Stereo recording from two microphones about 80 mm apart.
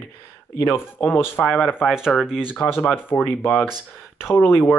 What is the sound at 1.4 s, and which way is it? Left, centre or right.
Speech, centre.